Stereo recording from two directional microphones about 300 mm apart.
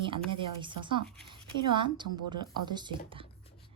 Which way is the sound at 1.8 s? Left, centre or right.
Centre.